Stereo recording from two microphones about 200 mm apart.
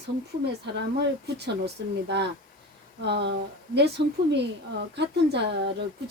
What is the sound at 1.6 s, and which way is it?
A woman's voice, 60° right (ahead or behind).